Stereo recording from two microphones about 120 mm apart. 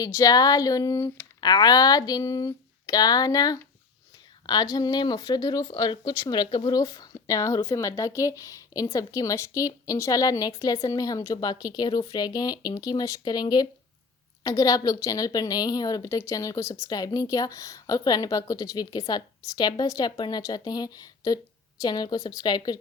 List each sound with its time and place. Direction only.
0.0 s speech: 30° left (ahead or behind)